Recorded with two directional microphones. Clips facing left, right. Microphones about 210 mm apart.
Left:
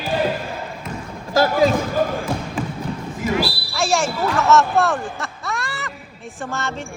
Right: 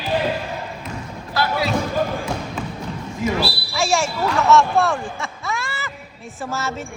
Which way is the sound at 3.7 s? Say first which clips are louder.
Even; centre (ahead or behind).